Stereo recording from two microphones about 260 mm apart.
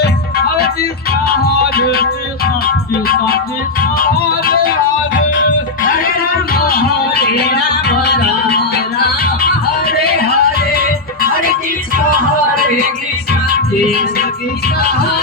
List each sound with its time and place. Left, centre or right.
0.0 s music: left
6.0 s music: left
12.5 s music: left